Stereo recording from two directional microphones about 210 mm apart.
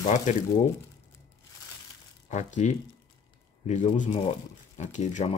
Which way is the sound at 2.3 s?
35° left (ahead or behind).